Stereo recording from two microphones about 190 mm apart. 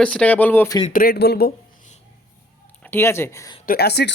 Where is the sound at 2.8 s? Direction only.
10° left (ahead or behind).